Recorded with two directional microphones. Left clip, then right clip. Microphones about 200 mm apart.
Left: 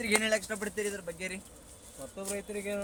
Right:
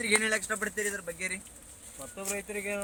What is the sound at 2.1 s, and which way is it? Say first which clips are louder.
Speech: right 2 dB; 15° right (ahead or behind).